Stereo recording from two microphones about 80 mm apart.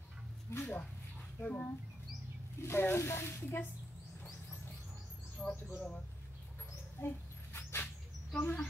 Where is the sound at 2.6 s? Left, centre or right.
Left.